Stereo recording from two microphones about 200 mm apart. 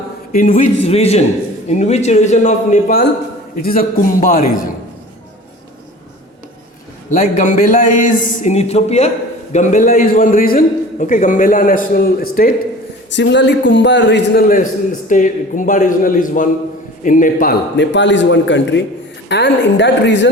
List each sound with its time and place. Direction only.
0.3 s a man's voice: 40° left (ahead or behind)
0.9 s a man's voice: 30° left (ahead or behind)
7.1 s a man's voice: 40° left (ahead or behind)
13.1 s a man's voice: 65° left (ahead or behind)
14.4 s a man's voice: 40° left (ahead or behind)
17.7 s a man's voice: 60° left (ahead or behind)